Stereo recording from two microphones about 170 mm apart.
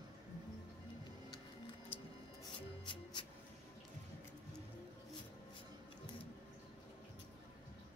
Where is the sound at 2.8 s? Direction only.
30° left (ahead or behind).